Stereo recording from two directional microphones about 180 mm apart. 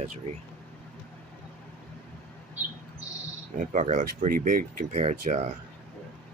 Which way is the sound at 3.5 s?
45° right (ahead or behind).